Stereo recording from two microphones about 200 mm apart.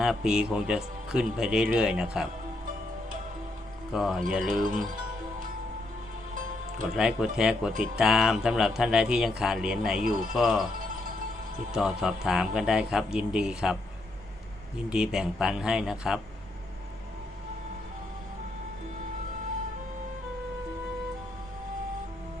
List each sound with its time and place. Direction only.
0.0 s speech: 5° right (ahead or behind)
3.9 s speech: centre (ahead or behind)
4.6 s speech: 40° right (ahead or behind)
6.3 s music: 40° right (ahead or behind)
6.9 s speech: 5° right (ahead or behind)
10.0 s speech: 45° right (ahead or behind)
10.3 s speech: centre (ahead or behind)
10.8 s music: 45° right (ahead or behind)
11.7 s speech: 5° right (ahead or behind)
14.8 s speech: 5° right (ahead or behind)